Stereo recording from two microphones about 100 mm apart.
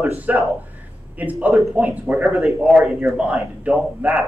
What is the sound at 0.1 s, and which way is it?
Speech, 15° right (ahead or behind).